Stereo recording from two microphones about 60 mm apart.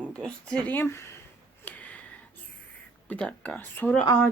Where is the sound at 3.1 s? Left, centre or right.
Left.